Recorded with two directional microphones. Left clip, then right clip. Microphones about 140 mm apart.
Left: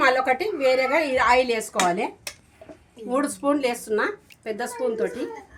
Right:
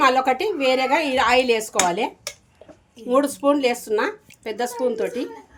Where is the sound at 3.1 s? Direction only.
70° right (ahead or behind); by 5.0 s 85° right.